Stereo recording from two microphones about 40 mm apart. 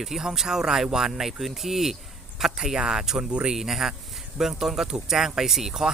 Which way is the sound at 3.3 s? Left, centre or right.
Right.